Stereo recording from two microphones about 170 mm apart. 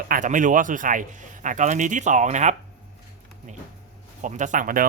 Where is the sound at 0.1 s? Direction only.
50° right (ahead or behind).